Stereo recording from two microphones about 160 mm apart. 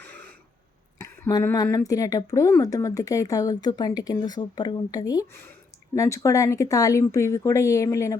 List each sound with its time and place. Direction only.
0.0 s throat clearing: 10° left (ahead or behind)
0.9 s speech: 20° left (ahead or behind)